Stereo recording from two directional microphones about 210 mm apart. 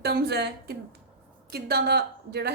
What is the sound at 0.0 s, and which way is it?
A woman's voice, 50° right (ahead or behind).